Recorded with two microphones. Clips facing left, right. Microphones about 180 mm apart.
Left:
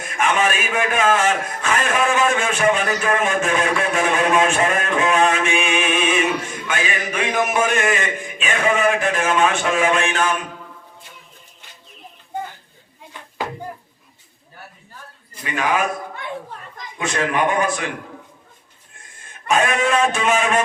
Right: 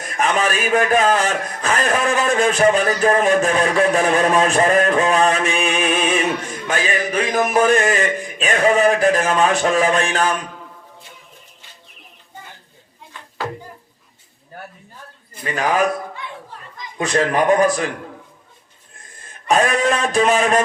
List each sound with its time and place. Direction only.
0.0 s a man's voice: 35° right (ahead or behind)
15.4 s a man's voice: 35° right (ahead or behind)
17.0 s a man's voice: 35° right (ahead or behind)
19.3 s a man's voice: 35° right (ahead or behind)